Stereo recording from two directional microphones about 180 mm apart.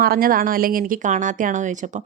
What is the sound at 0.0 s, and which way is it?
Speech, 55° right (ahead or behind).